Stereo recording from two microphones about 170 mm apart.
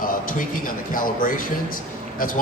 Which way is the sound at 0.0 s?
55° left (ahead or behind).